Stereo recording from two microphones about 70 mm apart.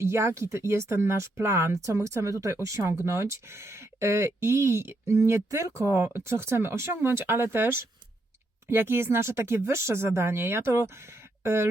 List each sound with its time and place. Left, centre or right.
0.0 s speech: right